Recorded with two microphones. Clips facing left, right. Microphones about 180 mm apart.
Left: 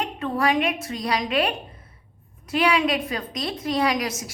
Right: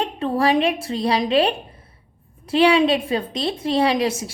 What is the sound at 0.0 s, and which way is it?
A woman's voice, 30° right (ahead or behind).